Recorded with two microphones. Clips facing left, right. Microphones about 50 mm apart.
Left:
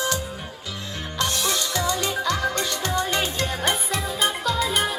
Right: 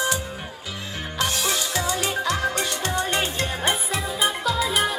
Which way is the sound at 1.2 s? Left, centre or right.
Centre.